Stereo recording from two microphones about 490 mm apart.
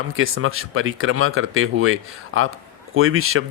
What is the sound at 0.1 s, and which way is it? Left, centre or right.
Speech, right.